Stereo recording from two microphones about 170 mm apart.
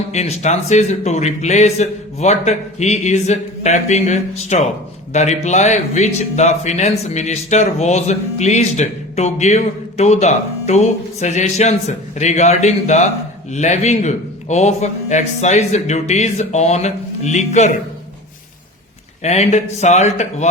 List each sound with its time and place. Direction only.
0.1 s speech: 40° left (ahead or behind)
19.2 s speech: 40° left (ahead or behind)